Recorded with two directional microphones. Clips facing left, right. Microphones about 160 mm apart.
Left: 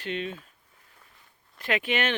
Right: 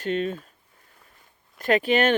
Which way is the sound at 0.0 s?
45° right (ahead or behind).